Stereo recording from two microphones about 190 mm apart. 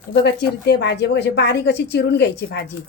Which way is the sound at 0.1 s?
65° left (ahead or behind).